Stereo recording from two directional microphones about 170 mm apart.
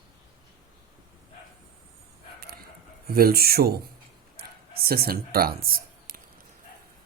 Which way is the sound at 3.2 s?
60° right (ahead or behind).